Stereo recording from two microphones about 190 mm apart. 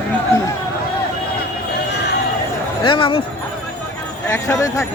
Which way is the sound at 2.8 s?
25° left (ahead or behind).